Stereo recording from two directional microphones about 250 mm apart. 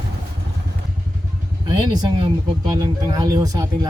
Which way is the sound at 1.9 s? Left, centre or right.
Centre.